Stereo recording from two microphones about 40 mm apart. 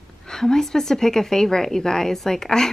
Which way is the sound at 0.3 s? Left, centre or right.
Centre.